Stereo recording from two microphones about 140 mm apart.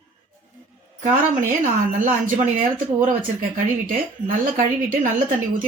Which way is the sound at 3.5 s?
65° right (ahead or behind).